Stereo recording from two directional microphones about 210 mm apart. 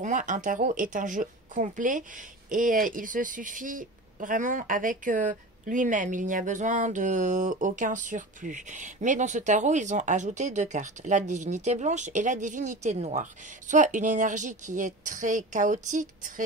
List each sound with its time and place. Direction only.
0.0 s speech: 35° right (ahead or behind)